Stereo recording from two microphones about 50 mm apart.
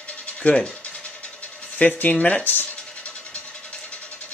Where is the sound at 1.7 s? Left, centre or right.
Left.